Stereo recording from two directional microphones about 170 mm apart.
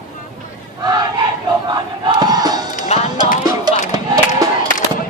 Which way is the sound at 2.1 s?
25° right (ahead or behind).